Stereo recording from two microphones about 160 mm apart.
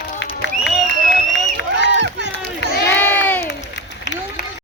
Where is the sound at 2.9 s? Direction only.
10° left (ahead or behind).